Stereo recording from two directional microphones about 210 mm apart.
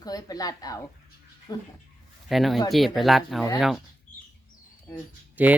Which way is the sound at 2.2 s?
Centre (ahead or behind).